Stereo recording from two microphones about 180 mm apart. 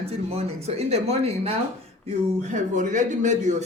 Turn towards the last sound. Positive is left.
turn(degrees=-40)  # may be behind; listen again after turning